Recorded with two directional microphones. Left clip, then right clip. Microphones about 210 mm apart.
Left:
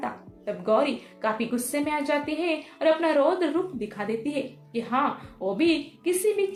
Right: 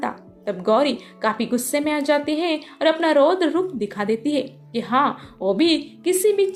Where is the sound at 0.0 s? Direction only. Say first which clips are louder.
Right 6 dB; 45° right (ahead or behind).